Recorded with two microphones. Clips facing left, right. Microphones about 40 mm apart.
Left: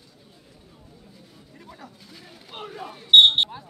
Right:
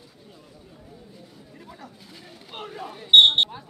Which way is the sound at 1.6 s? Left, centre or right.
Centre.